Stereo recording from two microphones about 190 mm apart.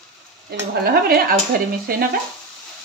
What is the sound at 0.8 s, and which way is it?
Speech, 50° right (ahead or behind).